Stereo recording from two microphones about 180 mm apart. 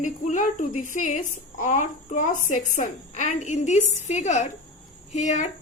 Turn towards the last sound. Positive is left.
turn(degrees=40)  # may be behind; listen again after turning